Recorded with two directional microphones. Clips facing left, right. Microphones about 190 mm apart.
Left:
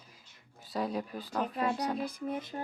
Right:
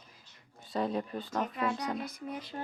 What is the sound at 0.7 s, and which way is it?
A woman's voice, 5° left (ahead or behind).